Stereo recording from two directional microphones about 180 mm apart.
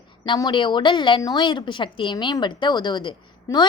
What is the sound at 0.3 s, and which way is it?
A woman's voice, 25° left (ahead or behind).